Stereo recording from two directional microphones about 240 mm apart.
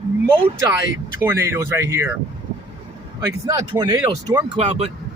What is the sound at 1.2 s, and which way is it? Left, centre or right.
Speech, centre.